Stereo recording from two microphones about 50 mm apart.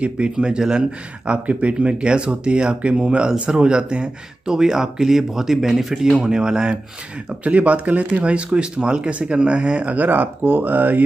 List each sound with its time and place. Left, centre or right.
0.0 s speech: right
7.4 s speech: right